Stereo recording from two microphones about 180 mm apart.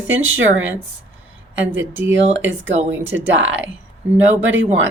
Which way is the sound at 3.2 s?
90° right.